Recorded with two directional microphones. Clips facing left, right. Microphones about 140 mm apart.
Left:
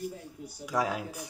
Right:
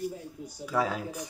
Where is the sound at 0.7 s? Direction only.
10° left (ahead or behind).